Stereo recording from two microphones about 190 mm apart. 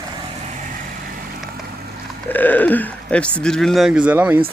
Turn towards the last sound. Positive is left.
turn(degrees=-10)  # may be behind; listen again after turning